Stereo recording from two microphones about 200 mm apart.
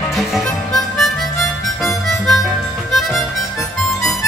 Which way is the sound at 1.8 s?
Centre (ahead or behind).